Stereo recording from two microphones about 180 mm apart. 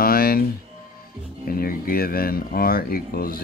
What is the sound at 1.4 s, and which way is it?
Speech, 55° left (ahead or behind).